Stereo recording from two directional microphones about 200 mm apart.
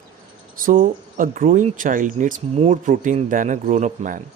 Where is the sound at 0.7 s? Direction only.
40° right (ahead or behind).